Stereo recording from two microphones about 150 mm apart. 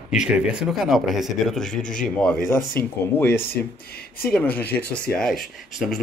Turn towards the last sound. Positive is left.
turn(degrees=0)  # may be behind; listen again after turning